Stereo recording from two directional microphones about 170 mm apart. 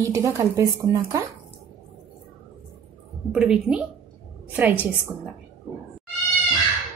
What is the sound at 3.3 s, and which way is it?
A woman's voice, 5° right (ahead or behind).